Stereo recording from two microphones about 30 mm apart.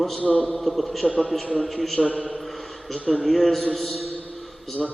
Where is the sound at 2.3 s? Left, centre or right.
Centre.